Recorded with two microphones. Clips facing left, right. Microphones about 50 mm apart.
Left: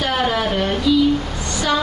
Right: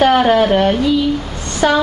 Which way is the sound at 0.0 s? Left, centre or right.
Right.